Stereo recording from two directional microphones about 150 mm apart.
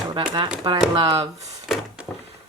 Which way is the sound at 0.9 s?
40° right (ahead or behind).